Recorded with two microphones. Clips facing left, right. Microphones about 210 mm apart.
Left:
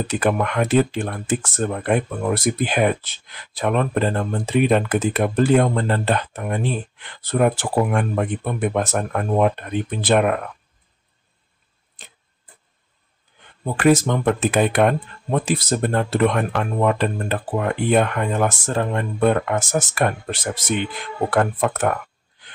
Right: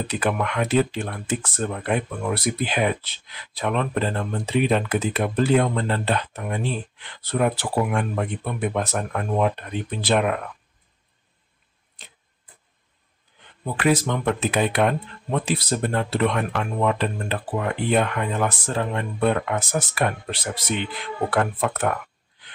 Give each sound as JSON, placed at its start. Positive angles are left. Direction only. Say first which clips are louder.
{"t": 0.1, "sound": "speech", "louder": "left 5 dB", "side_deg": 45}
{"t": 13.7, "sound": "speech", "louder": "left 5 dB", "side_deg": 45}